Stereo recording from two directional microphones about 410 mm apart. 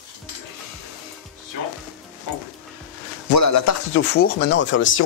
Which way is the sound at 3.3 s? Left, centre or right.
Left.